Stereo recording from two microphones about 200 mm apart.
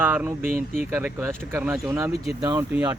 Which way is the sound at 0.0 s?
10° right (ahead or behind).